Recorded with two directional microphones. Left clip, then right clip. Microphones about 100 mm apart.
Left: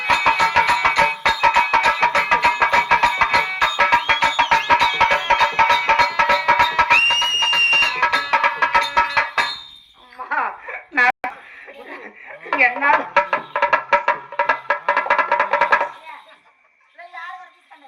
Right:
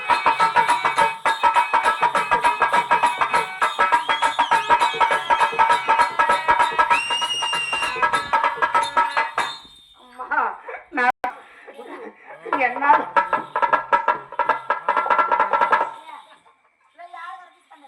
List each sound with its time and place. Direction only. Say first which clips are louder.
0.0 s music: left 2 dB; 20° left (ahead or behind)
0.4 s music: left 2 dB; 35° left (ahead or behind)
10.2 s laughter: even; 30° left (ahead or behind)
12.5 s dishes: left 5 dB; 20° left (ahead or behind)
12.8 s music: left 1 dB; 25° left (ahead or behind)